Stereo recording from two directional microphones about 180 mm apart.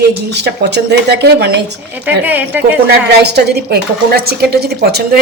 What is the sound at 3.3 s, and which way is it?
Speech, 65° right (ahead or behind).